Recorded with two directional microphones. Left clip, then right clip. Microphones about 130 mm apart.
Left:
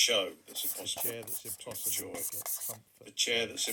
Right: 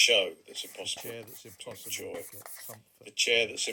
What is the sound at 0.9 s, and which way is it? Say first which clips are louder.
Speech: left 1 dB; centre (ahead or behind).